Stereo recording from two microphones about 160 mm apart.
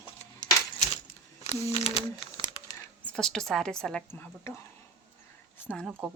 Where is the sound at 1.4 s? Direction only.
40° left (ahead or behind).